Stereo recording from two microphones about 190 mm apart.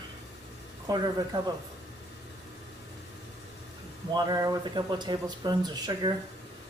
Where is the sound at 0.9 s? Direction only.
20° right (ahead or behind).